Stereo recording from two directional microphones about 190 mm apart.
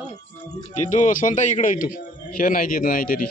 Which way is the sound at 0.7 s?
40° left (ahead or behind).